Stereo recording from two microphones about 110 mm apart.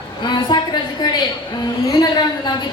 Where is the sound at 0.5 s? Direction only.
40° left (ahead or behind).